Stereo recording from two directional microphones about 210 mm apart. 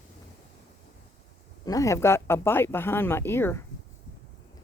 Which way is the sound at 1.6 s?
15° left (ahead or behind).